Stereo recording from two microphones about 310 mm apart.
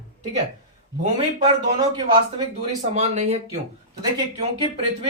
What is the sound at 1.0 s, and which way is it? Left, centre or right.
A man's voice, centre.